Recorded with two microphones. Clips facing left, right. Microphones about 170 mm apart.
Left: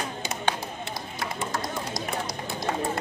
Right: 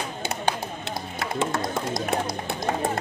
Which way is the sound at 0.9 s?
85° right.